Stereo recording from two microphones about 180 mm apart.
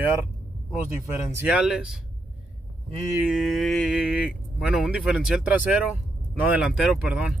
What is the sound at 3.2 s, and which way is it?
Speech, centre (ahead or behind).